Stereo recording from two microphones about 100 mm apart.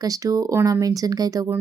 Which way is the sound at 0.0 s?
35° right (ahead or behind).